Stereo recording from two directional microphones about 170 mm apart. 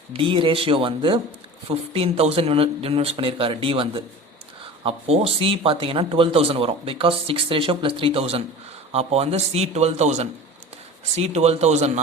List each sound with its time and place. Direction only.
0.1 s speech: 30° right (ahead or behind)